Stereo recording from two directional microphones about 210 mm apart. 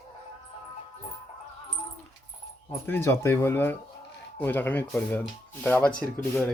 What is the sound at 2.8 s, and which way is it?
Speech, 10° left (ahead or behind).